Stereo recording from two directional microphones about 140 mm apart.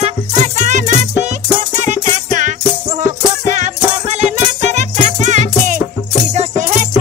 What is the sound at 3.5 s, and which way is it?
Music, 55° right (ahead or behind).